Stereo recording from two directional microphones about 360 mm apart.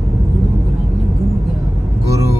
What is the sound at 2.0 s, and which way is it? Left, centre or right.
Vehicle, centre.